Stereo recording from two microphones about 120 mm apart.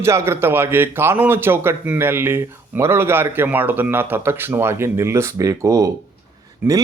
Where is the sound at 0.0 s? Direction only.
20° right (ahead or behind).